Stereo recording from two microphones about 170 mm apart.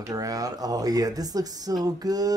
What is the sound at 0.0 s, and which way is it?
Speech, 20° right (ahead or behind).